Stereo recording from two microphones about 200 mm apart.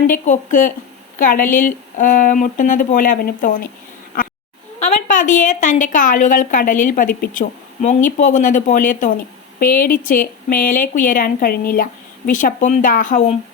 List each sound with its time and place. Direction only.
0.1 s a woman's voice: 40° left (ahead or behind)
4.8 s a woman's voice: 35° left (ahead or behind)